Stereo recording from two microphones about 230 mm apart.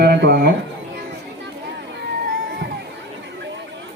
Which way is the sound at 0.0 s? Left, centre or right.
Right.